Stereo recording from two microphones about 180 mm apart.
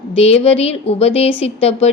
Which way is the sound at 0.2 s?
35° left (ahead or behind).